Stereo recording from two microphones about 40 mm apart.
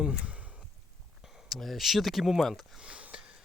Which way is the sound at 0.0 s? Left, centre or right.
Right.